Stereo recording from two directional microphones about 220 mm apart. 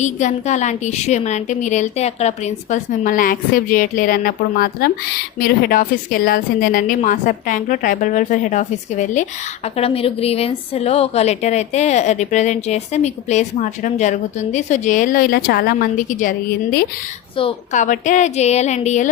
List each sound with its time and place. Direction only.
0.0 s a woman's voice: 35° left (ahead or behind)
17.3 s a woman's voice: 30° left (ahead or behind)